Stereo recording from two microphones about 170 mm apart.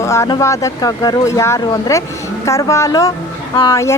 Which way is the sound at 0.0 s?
15° left (ahead or behind).